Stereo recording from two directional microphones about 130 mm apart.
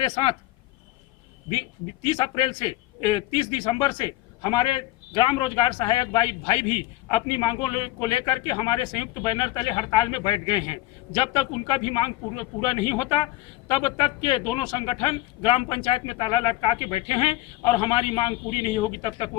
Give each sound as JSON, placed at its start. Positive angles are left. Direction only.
{"t": 0.0, "sound": "a man's voice", "side_deg": 45}
{"t": 2.0, "sound": "a man's voice", "side_deg": 45}